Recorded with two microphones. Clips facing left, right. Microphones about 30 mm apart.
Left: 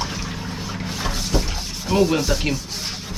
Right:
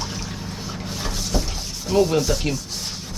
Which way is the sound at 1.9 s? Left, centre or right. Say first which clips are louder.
Even; centre.